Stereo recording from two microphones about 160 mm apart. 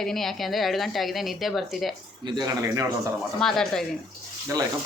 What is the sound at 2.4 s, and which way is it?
Speech, 20° right (ahead or behind).